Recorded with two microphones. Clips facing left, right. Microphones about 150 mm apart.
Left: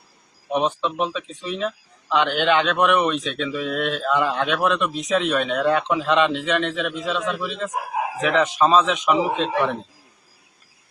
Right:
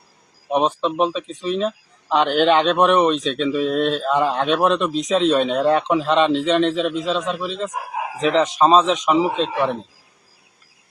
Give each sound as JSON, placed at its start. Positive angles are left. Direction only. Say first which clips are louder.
{"t": 0.5, "sound": "speech", "louder": "right 3 dB", "side_deg": -35}